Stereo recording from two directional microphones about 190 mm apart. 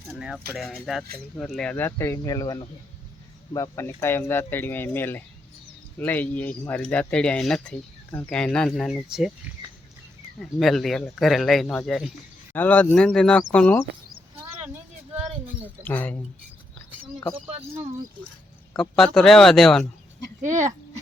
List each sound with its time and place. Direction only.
0.2 s speech: centre (ahead or behind)
10.4 s speech: centre (ahead or behind)
15.8 s speech: 10° left (ahead or behind)
18.8 s speech: centre (ahead or behind)
20.4 s speech: 15° right (ahead or behind)